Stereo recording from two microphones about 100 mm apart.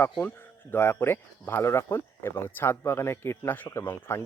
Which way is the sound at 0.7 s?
25° left (ahead or behind).